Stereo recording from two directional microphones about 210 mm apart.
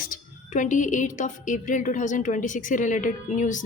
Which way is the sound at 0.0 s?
40° left (ahead or behind).